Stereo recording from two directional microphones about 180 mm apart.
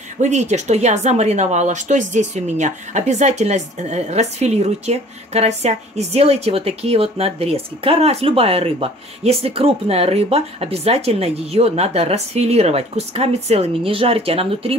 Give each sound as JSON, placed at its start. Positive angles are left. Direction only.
{"t": 0.2, "sound": "speech", "side_deg": -40}